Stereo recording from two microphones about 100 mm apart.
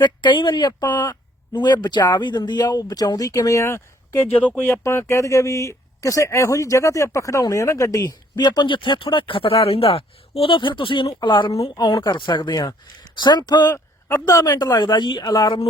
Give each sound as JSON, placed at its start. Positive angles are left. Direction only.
{"t": 0.0, "sound": "speech", "side_deg": 50}
{"t": 4.7, "sound": "speech", "side_deg": 25}
{"t": 13.7, "sound": "speech", "side_deg": 30}